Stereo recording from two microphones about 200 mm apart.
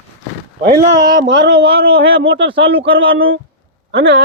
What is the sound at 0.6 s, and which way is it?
Speech, 55° right (ahead or behind).